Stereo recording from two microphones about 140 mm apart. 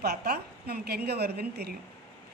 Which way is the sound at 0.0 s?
90° right.